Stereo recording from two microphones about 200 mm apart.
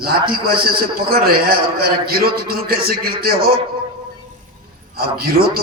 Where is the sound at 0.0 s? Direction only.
50° right (ahead or behind).